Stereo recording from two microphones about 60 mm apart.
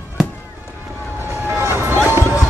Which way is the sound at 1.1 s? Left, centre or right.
Right.